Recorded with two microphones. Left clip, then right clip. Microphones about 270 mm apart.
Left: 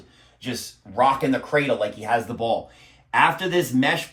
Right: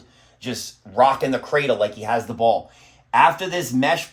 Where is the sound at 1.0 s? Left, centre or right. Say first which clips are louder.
Right 3 dB; right.